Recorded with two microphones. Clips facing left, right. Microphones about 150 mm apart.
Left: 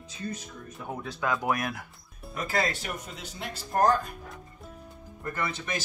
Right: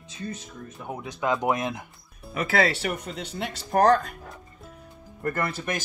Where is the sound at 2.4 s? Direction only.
75° right (ahead or behind).